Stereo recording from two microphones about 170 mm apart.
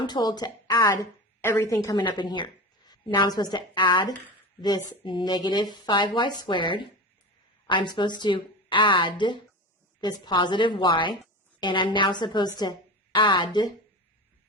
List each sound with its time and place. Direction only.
0.0 s a woman's voice: 25° left (ahead or behind)
1.4 s a woman's voice: 15° left (ahead or behind)